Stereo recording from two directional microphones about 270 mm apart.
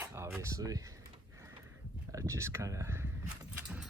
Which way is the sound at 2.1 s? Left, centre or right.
Centre.